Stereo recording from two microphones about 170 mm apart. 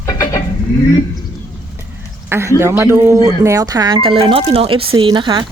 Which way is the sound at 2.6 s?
15° right (ahead or behind).